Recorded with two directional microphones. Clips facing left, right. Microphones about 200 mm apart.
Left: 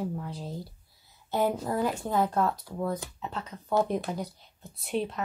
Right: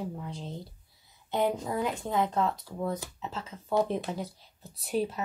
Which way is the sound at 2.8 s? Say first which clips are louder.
Left 1 dB; centre (ahead or behind).